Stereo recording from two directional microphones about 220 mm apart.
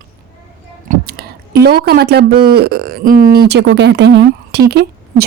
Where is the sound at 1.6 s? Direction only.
45° right (ahead or behind).